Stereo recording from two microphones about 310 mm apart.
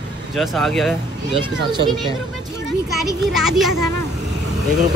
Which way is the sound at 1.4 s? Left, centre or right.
Centre.